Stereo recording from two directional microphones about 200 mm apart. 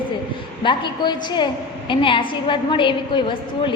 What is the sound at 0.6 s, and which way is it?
A woman's voice, 25° left (ahead or behind).